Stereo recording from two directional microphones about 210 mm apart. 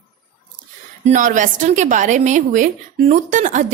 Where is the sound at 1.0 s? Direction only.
35° right (ahead or behind).